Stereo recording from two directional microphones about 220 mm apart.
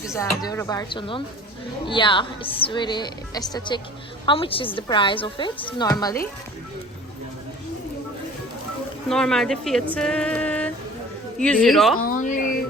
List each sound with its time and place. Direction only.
0.1 s a woman's voice: 15° left (ahead or behind)
9.0 s speech: centre (ahead or behind)
11.9 s a sound: 40° left (ahead or behind)